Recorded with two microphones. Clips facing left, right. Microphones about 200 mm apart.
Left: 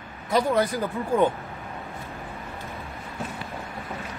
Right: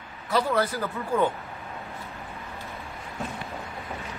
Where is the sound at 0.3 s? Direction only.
15° left (ahead or behind).